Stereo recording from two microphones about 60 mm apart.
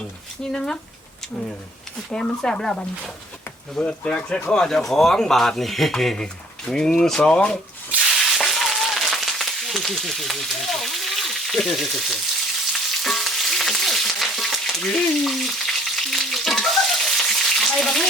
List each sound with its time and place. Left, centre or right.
0.4 s a man's voice: centre
2.0 s a man's voice: centre
8.0 s a sound: centre
12.7 s frying: centre